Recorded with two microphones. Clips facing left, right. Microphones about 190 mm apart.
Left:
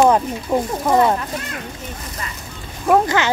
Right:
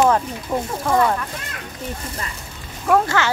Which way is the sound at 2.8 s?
20° left (ahead or behind).